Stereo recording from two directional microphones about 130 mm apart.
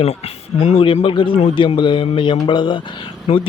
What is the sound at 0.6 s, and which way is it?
A man's voice, 45° left (ahead or behind).